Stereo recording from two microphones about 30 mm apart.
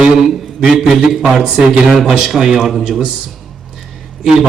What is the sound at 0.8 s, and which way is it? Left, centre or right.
Speech, centre.